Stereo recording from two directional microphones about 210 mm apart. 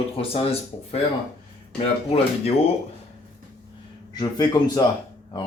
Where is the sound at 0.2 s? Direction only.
30° left (ahead or behind).